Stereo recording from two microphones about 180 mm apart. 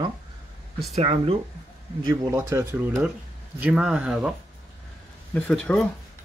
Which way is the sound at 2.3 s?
15° right (ahead or behind).